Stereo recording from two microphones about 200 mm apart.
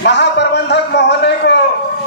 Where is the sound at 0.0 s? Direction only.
60° left (ahead or behind).